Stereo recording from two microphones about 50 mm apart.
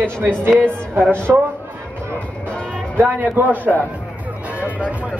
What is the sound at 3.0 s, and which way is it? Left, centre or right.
A man's voice, right.